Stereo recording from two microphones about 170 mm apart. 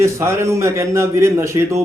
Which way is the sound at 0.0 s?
15° right (ahead or behind).